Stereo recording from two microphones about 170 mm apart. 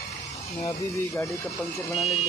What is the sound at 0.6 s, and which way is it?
Speech, 15° left (ahead or behind).